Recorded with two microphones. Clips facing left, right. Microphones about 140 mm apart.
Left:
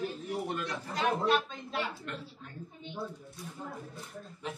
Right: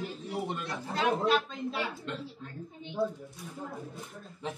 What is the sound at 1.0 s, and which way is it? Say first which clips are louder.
Speech: right 1 dB; 5° right (ahead or behind).